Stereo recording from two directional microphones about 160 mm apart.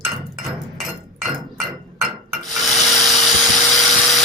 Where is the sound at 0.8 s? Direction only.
Centre (ahead or behind).